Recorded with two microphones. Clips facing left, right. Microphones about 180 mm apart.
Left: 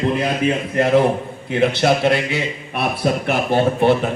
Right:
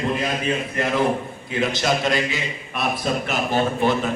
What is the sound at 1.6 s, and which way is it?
A man's voice, 60° left (ahead or behind).